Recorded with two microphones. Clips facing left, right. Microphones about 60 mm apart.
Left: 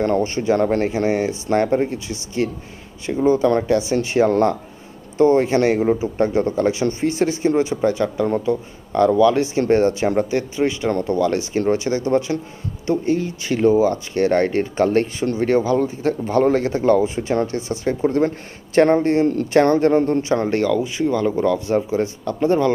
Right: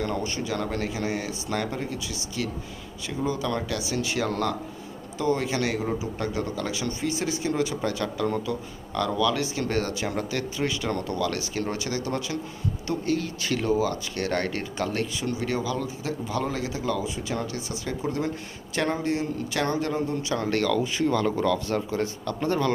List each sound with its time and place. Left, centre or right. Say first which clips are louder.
0.0 s a man's voice: left 10 dB; left
20.2 s speech: left 7 dB; left